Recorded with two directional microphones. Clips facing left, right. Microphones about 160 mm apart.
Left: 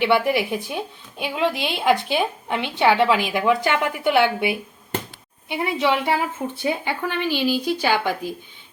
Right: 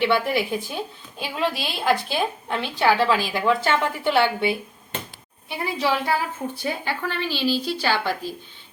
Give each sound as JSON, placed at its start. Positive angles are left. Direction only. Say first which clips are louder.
{"t": 0.0, "sound": "a woman's voice", "louder": "left 2 dB", "side_deg": 15}